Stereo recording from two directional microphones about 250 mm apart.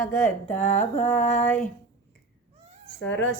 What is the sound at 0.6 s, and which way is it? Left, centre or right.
Speech, left.